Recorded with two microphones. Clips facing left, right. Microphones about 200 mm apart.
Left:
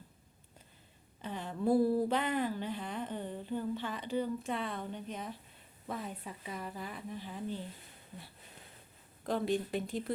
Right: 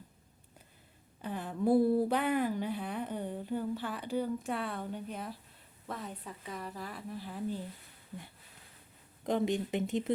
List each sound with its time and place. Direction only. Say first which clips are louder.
1.2 s speech: right 2 dB; 10° right (ahead or behind)
9.2 s speech: right 2 dB; 20° right (ahead or behind)